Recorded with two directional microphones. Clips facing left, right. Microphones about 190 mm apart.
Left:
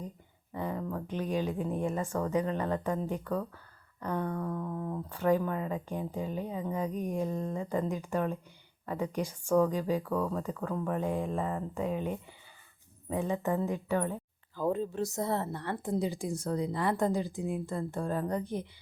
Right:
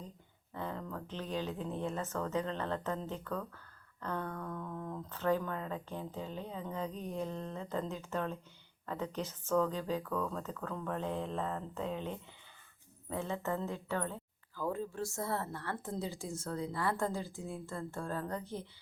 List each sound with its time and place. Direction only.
0.5 s speech: 10° left (ahead or behind)